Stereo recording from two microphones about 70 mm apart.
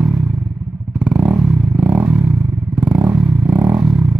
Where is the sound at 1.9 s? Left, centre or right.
Right.